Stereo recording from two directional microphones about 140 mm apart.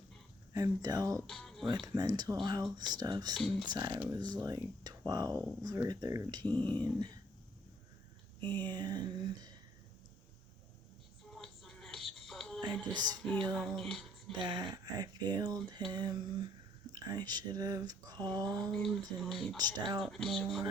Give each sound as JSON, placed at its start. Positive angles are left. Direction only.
{"t": 0.5, "sound": "speech", "side_deg": -25}
{"t": 1.3, "sound": "music", "side_deg": 5}
{"t": 1.6, "sound": "speech", "side_deg": -30}
{"t": 6.4, "sound": "speech", "side_deg": 10}
{"t": 6.7, "sound": "speech", "side_deg": -30}
{"t": 8.6, "sound": "speech", "side_deg": -30}
{"t": 11.3, "sound": "music", "side_deg": 0}
{"t": 12.9, "sound": "speech", "side_deg": -30}
{"t": 13.1, "sound": "speech", "side_deg": 5}
{"t": 14.3, "sound": "speech", "side_deg": -30}
{"t": 18.5, "sound": "speech", "side_deg": 5}
{"t": 19.5, "sound": "speech", "side_deg": -30}
{"t": 20.0, "sound": "speech", "side_deg": 5}